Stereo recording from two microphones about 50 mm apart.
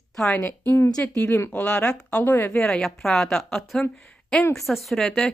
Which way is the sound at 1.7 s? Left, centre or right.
Centre.